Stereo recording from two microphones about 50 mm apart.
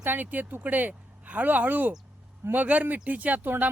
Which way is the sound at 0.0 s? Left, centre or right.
Right.